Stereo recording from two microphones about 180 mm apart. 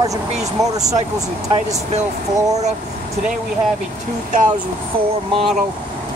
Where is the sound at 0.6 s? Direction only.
20° right (ahead or behind).